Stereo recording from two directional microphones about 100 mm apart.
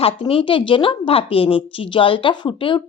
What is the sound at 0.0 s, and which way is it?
A woman's voice, 65° left (ahead or behind).